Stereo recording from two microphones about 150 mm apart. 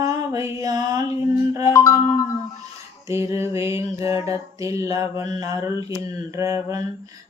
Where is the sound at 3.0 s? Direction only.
20° right (ahead or behind).